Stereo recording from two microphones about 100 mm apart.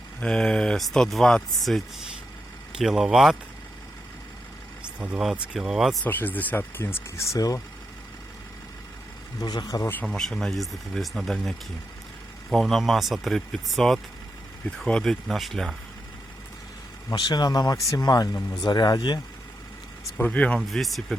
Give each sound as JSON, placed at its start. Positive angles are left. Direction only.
{"t": 0.2, "sound": "speech", "side_deg": 10}
{"t": 2.7, "sound": "speech", "side_deg": -5}
{"t": 4.9, "sound": "speech", "side_deg": -10}
{"t": 6.1, "sound": "speech", "side_deg": 20}
{"t": 9.4, "sound": "speech", "side_deg": 45}
{"t": 9.8, "sound": "speech", "side_deg": 20}
{"t": 10.1, "sound": "speech", "side_deg": 5}
{"t": 17.1, "sound": "speech", "side_deg": 45}
{"t": 20.1, "sound": "speech", "side_deg": 15}
{"t": 20.6, "sound": "speech", "side_deg": 0}